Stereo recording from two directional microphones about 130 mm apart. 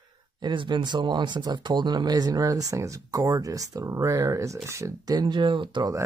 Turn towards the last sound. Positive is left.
turn(degrees=-40)  # may be behind; listen again after turning